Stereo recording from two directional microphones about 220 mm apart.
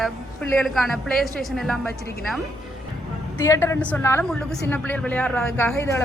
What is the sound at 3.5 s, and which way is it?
A child's voice, 10° left (ahead or behind).